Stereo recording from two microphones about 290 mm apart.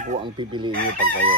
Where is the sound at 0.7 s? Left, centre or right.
Right.